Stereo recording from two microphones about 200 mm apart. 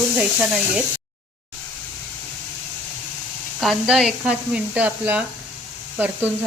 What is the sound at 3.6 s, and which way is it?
Speech, centre (ahead or behind).